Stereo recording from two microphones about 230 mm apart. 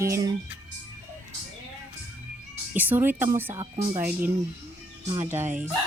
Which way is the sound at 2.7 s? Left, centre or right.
Centre.